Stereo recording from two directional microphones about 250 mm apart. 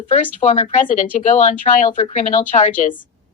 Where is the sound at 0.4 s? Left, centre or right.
Left.